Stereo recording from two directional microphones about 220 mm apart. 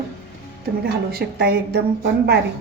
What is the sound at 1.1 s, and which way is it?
A woman's voice, 45° right (ahead or behind).